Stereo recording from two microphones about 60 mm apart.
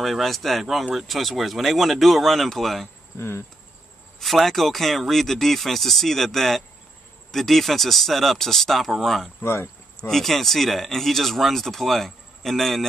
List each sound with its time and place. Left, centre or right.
0.0 s speech: centre
3.2 s cricket: left
4.2 s speech: centre
9.4 s cricket: left
9.9 s speech: centre